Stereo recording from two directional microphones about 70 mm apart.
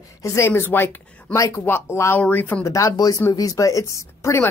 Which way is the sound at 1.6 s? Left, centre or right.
Left.